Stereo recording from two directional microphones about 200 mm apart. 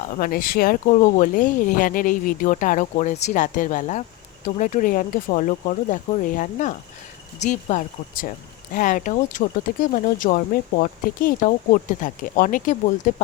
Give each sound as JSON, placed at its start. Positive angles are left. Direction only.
{"t": 0.2, "sound": "speech", "side_deg": 45}